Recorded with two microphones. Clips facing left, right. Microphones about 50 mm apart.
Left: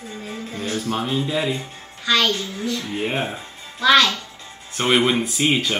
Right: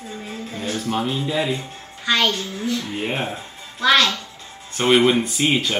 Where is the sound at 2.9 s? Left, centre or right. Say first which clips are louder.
Left 1 dB; centre.